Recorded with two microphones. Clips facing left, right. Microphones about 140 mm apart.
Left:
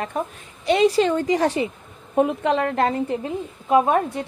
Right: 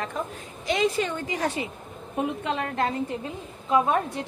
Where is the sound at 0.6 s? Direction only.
30° left (ahead or behind).